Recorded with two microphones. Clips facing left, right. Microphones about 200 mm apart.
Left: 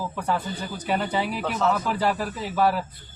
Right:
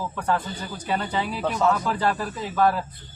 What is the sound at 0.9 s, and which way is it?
Speech, 10° left (ahead or behind).